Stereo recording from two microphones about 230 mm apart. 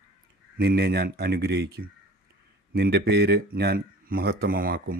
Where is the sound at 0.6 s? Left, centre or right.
Right.